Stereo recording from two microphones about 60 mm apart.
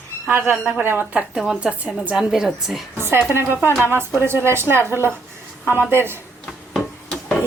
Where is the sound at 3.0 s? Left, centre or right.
Right.